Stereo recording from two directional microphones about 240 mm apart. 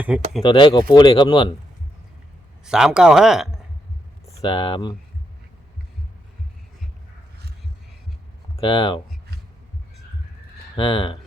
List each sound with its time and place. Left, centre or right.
0.0 s speech: centre
0.4 s speech: left
2.6 s speech: centre
4.4 s speech: centre
8.5 s speech: left
10.8 s speech: left